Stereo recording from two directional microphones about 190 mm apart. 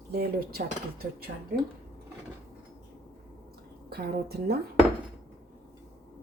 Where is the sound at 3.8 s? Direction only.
55° right (ahead or behind).